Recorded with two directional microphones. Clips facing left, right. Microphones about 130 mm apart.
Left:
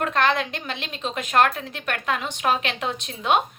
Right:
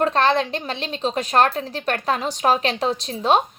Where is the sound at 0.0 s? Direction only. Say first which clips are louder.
Right 4 dB; 35° right (ahead or behind).